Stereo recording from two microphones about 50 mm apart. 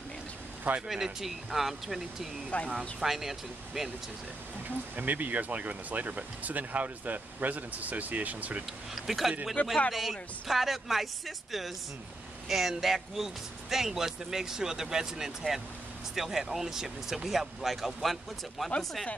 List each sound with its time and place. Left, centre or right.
0.8 s speech: centre
2.5 s speech: left
3.0 s speech: centre
4.6 s speech: right
8.9 s speech: centre